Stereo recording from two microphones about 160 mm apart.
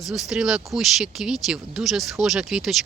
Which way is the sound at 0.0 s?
Centre (ahead or behind).